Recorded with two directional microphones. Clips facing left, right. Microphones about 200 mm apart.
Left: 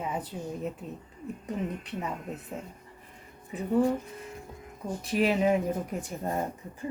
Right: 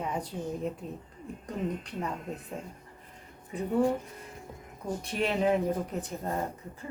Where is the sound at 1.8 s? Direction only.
5° left (ahead or behind).